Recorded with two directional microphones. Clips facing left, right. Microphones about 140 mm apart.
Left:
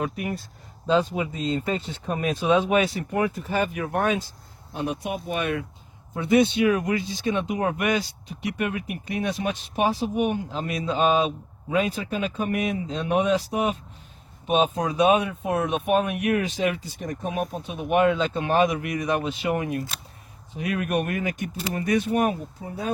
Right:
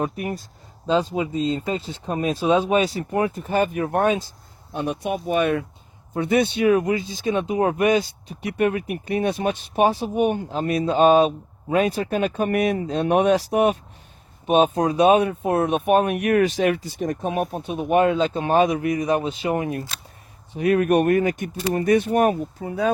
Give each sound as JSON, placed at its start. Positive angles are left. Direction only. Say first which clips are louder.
{"t": 0.0, "sound": "speech", "louder": "right 3 dB", "side_deg": -30}
{"t": 3.3, "sound": "speech", "louder": "right 4 dB", "side_deg": -45}
{"t": 6.7, "sound": "speech", "louder": "right 4 dB", "side_deg": -30}
{"t": 8.5, "sound": "speech", "louder": "right 9 dB", "side_deg": -45}
{"t": 11.9, "sound": "speech", "louder": "right 5 dB", "side_deg": -60}
{"t": 14.4, "sound": "speech", "louder": "right 5 dB", "side_deg": -45}
{"t": 17.8, "sound": "speech", "louder": "right 2 dB", "side_deg": -35}
{"t": 18.9, "sound": "speech", "louder": "right 4 dB", "side_deg": -30}
{"t": 20.5, "sound": "speech", "louder": "right 8 dB", "side_deg": -50}
{"t": 22.6, "sound": "speech", "louder": "right 9 dB", "side_deg": -75}